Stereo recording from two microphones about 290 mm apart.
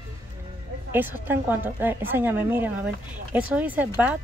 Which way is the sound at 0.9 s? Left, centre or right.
Centre.